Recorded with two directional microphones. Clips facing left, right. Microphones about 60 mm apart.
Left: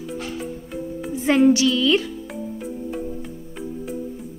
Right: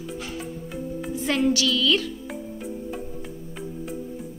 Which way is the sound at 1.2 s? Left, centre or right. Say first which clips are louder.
Left 7 dB; centre.